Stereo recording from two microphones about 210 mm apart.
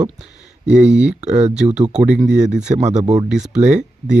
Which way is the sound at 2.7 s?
30° right (ahead or behind).